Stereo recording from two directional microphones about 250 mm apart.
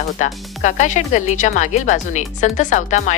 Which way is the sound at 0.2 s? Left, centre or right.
Left.